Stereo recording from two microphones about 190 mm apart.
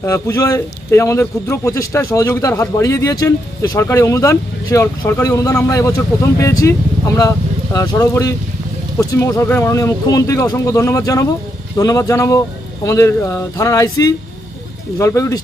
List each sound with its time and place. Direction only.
0.0 s a man's voice: 15° left (ahead or behind)